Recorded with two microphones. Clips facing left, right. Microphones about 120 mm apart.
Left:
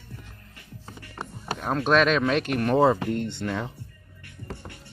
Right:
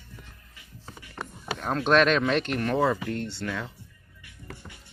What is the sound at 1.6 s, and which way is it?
Speech, 5° left (ahead or behind).